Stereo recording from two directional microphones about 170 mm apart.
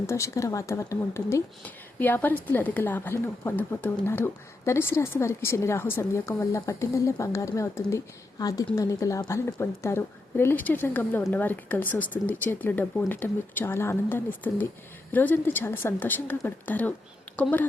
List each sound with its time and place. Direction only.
0.1 s speech: 15° left (ahead or behind)